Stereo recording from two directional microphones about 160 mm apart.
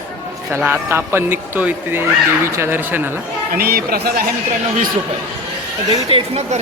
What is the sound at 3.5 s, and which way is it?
Speech, 70° right (ahead or behind).